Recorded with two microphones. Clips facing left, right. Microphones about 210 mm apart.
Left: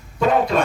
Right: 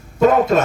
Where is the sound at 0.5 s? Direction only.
45° right (ahead or behind).